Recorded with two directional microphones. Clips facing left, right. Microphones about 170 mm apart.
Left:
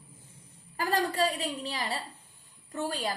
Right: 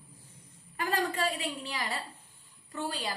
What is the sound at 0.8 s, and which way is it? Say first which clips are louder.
A woman's voice: left 3 dB; 35° left (ahead or behind).